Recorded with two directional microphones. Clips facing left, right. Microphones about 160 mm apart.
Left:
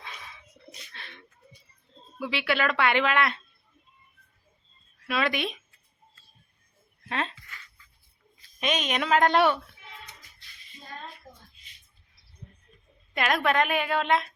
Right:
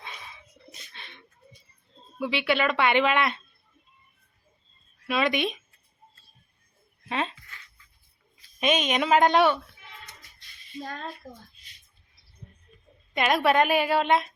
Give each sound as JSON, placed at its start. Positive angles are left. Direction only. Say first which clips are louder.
{"t": 2.2, "sound": "speech", "louder": "right 2 dB", "side_deg": 0}
{"t": 5.0, "sound": "speech", "louder": "right 3 dB", "side_deg": 0}
{"t": 7.1, "sound": "speech", "louder": "right 2 dB", "side_deg": -5}
{"t": 8.6, "sound": "speech", "louder": "right 4 dB", "side_deg": 0}
{"t": 10.8, "sound": "a child's voice", "louder": "right 4 dB", "side_deg": -90}
{"t": 13.1, "sound": "speech", "louder": "right 3 dB", "side_deg": -5}